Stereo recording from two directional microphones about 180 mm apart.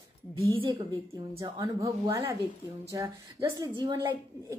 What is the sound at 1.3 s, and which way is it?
A woman's voice, 20° right (ahead or behind).